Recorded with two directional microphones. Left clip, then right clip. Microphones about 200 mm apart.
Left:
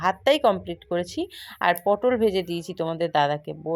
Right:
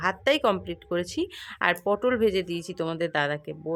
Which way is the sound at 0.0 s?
5° left (ahead or behind).